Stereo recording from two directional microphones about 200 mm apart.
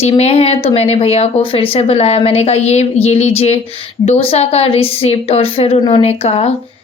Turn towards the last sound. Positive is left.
turn(degrees=30)  # may be behind; listen again after turning